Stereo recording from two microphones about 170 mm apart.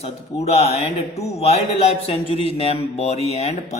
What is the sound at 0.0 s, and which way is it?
Speech, 40° left (ahead or behind).